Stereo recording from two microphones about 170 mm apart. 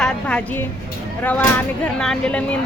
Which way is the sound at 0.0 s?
5° left (ahead or behind).